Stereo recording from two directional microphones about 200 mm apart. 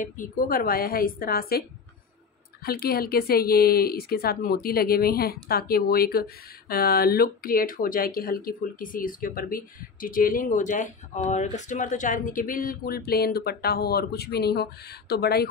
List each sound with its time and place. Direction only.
0.0 s speech: 45° left (ahead or behind)
2.6 s speech: 50° left (ahead or behind)